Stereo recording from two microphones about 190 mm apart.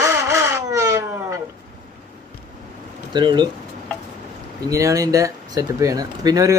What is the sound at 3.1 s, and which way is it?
Speech, 25° right (ahead or behind).